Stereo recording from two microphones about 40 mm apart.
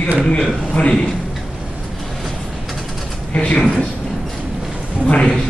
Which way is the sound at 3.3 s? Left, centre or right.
Left.